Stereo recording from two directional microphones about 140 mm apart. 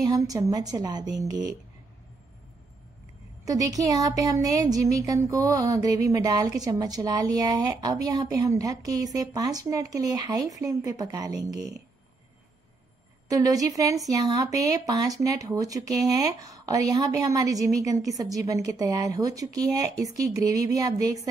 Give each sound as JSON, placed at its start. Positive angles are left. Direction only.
{"t": 0.1, "sound": "speech", "side_deg": -25}
{"t": 3.4, "sound": "speech", "side_deg": -25}
{"t": 13.3, "sound": "speech", "side_deg": -25}